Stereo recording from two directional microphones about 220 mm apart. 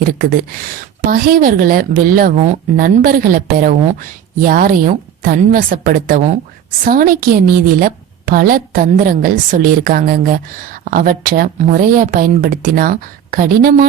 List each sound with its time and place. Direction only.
0.0 s a woman's voice: 40° right (ahead or behind)